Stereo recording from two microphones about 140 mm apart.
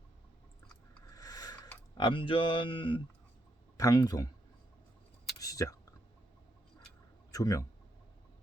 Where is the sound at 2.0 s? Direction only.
35° left (ahead or behind).